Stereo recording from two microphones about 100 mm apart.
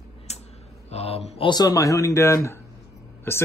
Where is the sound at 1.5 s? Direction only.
40° left (ahead or behind); by 3.4 s 25° left (ahead or behind).